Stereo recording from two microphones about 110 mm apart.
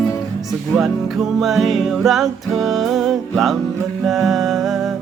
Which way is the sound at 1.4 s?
Centre (ahead or behind).